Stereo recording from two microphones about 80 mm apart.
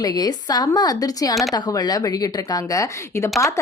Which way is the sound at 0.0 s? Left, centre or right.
Left.